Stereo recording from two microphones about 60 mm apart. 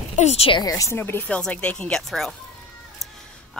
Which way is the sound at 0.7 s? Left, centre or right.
Left.